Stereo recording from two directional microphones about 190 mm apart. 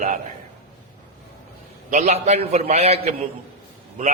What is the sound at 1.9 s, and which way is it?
A man's voice, 35° right (ahead or behind).